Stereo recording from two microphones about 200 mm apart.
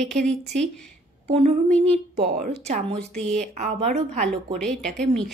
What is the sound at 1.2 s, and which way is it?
A woman's voice, 30° right (ahead or behind).